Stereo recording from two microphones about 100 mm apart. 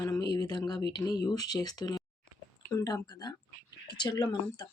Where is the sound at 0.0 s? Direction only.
40° left (ahead or behind).